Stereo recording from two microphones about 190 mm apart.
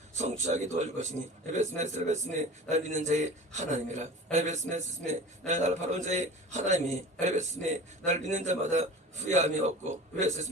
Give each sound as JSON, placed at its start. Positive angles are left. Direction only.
{"t": 0.1, "sound": "a man's voice", "side_deg": -40}